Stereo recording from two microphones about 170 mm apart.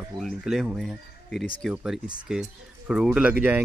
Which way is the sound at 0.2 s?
Centre (ahead or behind).